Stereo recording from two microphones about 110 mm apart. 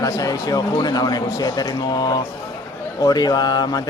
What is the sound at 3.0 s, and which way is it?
Speech, 35° left (ahead or behind).